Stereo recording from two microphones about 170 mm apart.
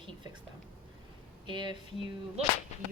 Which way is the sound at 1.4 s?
30° right (ahead or behind).